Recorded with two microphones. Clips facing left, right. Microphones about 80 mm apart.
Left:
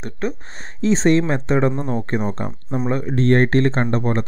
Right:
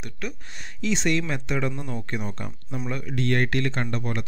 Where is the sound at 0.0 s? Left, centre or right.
Left.